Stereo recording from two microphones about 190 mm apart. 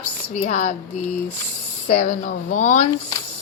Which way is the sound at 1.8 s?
45° left (ahead or behind).